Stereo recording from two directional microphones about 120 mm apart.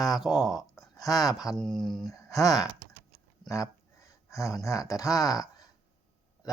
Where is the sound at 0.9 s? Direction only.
30° left (ahead or behind).